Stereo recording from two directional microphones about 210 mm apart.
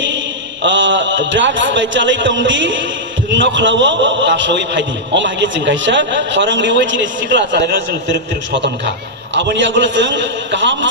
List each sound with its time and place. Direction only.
0.6 s a man's voice: 60° right (ahead or behind)
9.3 s a man's voice: 60° right (ahead or behind)